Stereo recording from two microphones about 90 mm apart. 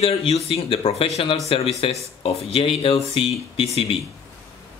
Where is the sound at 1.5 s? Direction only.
75° left (ahead or behind).